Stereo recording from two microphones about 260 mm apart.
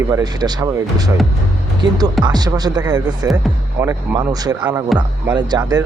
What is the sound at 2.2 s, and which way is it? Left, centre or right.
Speech, centre.